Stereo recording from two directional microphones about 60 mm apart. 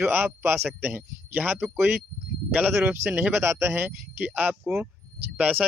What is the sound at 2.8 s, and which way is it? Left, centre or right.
Speech, centre.